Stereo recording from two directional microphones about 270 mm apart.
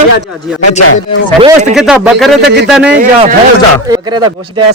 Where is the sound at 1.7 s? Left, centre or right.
Centre.